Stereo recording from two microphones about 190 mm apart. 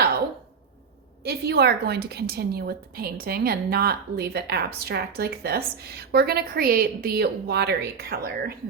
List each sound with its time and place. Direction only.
1.2 s a woman's voice: 60° right (ahead or behind)